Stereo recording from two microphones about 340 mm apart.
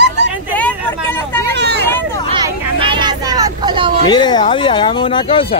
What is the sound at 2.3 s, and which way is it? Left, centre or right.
Vehicle, centre.